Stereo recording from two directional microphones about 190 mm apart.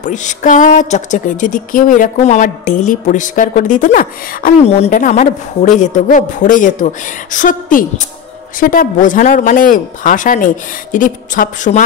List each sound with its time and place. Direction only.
0.0 s speech: 40° left (ahead or behind)
4.6 s a woman's voice: 35° left (ahead or behind)